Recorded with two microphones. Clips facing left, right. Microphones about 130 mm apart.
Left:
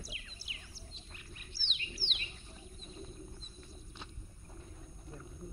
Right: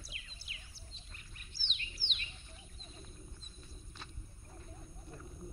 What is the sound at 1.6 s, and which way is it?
Bird, 20° right (ahead or behind).